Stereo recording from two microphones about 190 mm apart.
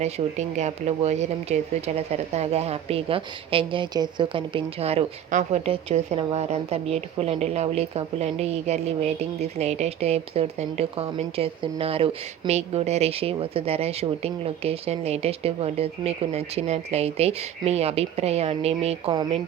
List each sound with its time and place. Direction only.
0.0 s a woman's voice: 35° right (ahead or behind)